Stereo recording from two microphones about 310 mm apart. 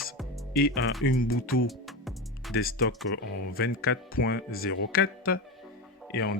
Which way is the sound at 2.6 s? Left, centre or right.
Left.